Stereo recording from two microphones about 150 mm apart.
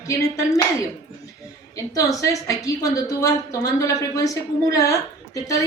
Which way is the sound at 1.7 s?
20° left (ahead or behind).